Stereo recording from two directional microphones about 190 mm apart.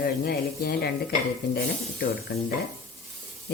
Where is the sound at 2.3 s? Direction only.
60° left (ahead or behind).